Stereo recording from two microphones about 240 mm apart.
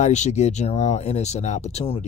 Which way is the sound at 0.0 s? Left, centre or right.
Left.